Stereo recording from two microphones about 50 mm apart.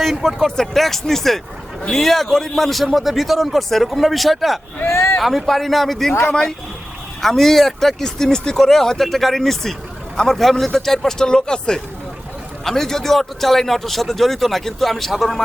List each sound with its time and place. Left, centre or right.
0.0 s speech: centre
4.9 s a sound: left
5.2 s speech: centre
7.2 s speech: centre